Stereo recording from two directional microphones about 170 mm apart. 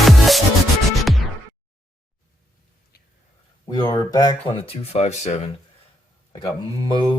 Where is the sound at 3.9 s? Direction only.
25° left (ahead or behind); by 5.5 s 40° left (ahead or behind).